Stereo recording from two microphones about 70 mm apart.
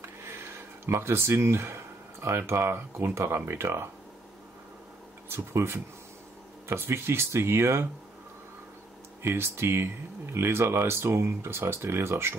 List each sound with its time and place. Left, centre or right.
0.2 s a sound: right
2.2 s speech: right
5.3 s speech: right
9.2 s speech: right